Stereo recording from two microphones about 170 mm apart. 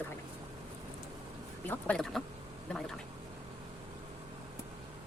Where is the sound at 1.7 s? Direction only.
5° left (ahead or behind).